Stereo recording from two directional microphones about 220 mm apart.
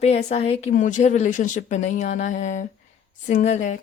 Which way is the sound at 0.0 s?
30° left (ahead or behind).